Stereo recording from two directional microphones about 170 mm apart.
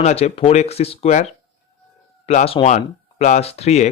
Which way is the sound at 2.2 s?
35° left (ahead or behind).